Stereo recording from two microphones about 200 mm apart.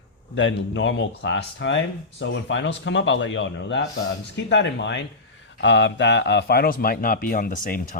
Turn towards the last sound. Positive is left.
turn(degrees=45)  # may be behind; listen again after turning